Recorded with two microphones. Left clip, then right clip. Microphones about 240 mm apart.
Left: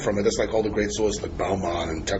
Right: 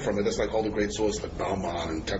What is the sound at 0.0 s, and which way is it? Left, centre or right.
A man's voice, left.